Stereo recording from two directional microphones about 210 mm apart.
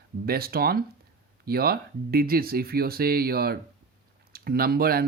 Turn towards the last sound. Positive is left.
turn(degrees=-45)  # may be behind; listen again after turning